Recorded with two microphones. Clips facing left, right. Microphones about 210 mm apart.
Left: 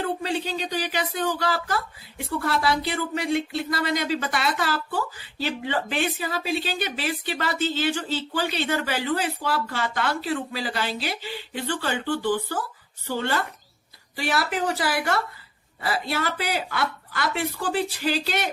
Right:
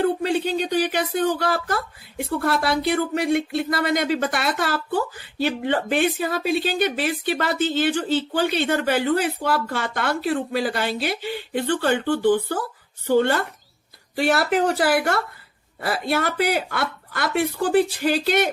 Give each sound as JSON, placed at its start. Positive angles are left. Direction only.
{"t": 0.0, "sound": "speech", "side_deg": -55}